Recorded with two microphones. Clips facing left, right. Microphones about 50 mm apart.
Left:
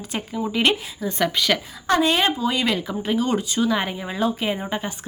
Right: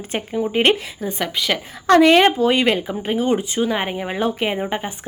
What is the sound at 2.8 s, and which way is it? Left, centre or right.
Speech, right.